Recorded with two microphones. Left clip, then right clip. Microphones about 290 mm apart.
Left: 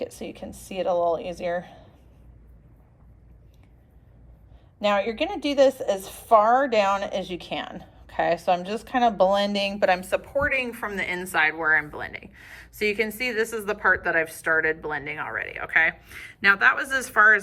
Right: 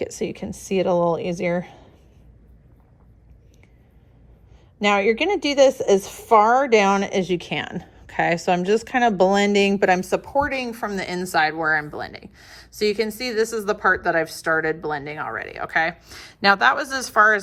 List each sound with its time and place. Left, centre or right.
0.0 s a woman's voice: right
4.8 s a woman's voice: right
10.3 s speech: centre